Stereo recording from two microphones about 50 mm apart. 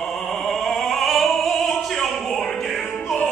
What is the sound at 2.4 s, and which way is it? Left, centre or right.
Music, centre.